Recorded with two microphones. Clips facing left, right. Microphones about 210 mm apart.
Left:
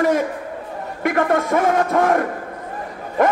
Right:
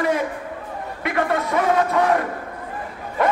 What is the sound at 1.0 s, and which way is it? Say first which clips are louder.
A man's voice: left 4 dB; 45° left (ahead or behind).